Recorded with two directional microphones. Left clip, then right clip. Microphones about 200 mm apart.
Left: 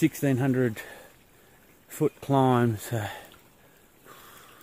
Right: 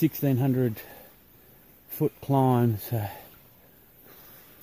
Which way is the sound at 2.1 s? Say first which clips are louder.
Left 1 dB; 5° right (ahead or behind).